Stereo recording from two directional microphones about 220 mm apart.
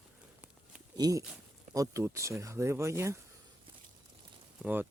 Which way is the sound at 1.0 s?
15° right (ahead or behind).